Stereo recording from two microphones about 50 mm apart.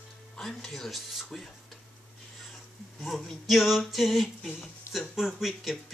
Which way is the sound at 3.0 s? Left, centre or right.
Centre.